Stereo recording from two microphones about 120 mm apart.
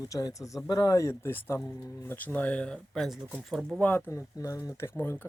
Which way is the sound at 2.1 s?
15° left (ahead or behind).